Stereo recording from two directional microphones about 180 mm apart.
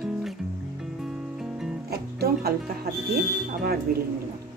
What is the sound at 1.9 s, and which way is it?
Speech, 60° right (ahead or behind).